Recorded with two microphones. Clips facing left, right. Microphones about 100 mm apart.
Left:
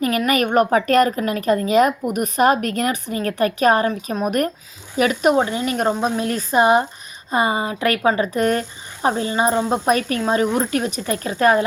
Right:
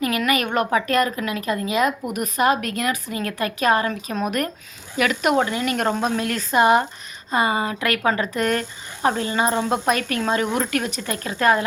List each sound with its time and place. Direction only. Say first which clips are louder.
0.0 s a woman's voice: left 3 dB; 35° left (ahead or behind)
5.9 s speech: left 2 dB; 10° left (ahead or behind)
6.1 s a woman's voice: left 2 dB; 30° left (ahead or behind)
8.4 s a woman's voice: left 3 dB; 35° left (ahead or behind)